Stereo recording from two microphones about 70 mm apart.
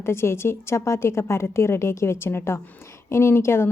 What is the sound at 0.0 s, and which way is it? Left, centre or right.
A woman's voice, left.